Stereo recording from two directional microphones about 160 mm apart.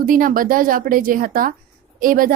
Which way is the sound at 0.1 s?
60° right (ahead or behind).